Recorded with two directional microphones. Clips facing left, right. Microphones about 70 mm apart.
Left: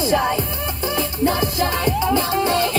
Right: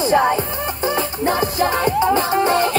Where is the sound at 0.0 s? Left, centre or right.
Right.